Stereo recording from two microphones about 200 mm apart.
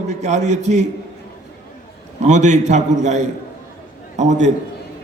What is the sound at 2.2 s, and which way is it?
A man's voice, 35° right (ahead or behind).